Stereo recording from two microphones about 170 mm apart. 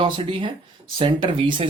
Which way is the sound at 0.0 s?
30° right (ahead or behind).